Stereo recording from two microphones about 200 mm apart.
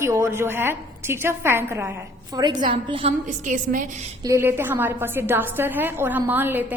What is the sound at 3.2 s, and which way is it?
Speech, 40° right (ahead or behind).